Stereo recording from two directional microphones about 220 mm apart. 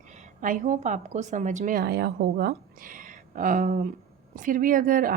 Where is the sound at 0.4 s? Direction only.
35° right (ahead or behind).